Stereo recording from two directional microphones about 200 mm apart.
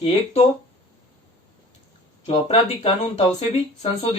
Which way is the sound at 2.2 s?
30° left (ahead or behind).